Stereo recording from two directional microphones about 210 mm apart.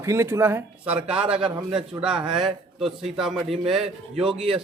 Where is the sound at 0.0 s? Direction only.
15° right (ahead or behind).